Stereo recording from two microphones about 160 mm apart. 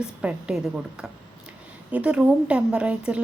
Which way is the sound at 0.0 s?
5° right (ahead or behind).